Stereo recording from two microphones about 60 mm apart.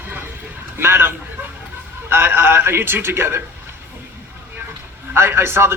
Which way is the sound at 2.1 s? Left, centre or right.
Right.